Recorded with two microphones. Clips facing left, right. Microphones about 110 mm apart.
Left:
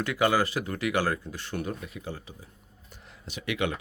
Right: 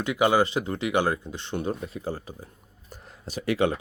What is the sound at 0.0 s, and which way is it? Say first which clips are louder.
Speech: right 3 dB; 20° right (ahead or behind).